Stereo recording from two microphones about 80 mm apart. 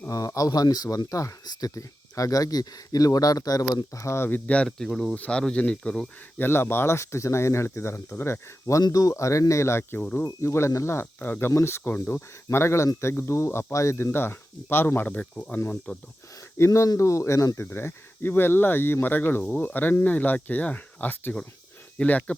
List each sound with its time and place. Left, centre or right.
0.1 s speech: left
3.9 s speech: left
4.4 s speech: centre
4.8 s speech: centre
5.1 s speech: centre
6.4 s speech: left
8.8 s speech: left
10.2 s speech: left
11.0 s speech: left
11.8 s speech: left
16.6 s speech: left
17.7 s speech: left